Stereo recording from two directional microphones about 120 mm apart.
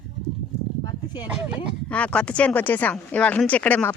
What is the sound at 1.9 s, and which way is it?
Speech, 10° left (ahead or behind).